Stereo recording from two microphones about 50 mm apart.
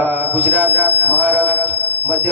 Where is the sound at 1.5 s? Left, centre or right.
Right.